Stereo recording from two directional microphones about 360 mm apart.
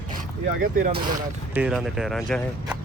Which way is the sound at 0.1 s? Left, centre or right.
Right.